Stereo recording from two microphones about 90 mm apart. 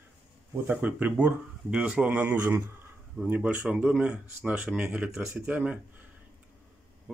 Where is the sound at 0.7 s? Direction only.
15° right (ahead or behind).